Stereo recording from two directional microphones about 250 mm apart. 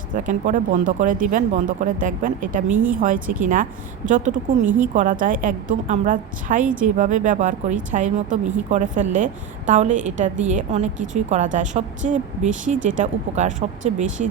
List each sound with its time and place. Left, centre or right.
0.1 s a woman's voice: right